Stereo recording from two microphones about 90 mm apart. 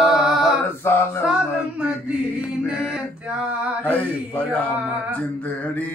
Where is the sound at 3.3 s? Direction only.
15° right (ahead or behind).